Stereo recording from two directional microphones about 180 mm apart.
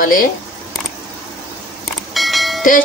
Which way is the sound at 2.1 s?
Centre (ahead or behind).